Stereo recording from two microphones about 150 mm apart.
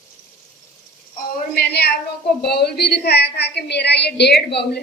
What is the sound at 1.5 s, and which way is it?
A woman's voice, 90° left.